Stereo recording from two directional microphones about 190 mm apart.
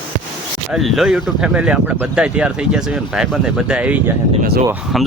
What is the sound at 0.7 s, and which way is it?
Speech, centre (ahead or behind).